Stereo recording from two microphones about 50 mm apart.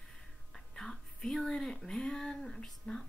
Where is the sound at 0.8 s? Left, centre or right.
Centre.